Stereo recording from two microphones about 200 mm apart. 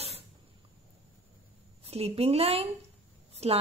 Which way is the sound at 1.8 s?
30° right (ahead or behind).